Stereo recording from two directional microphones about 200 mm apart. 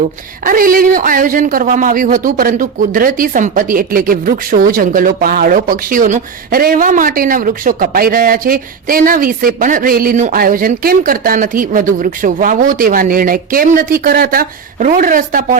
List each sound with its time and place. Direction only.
0.0 s a man's voice: 45° right (ahead or behind)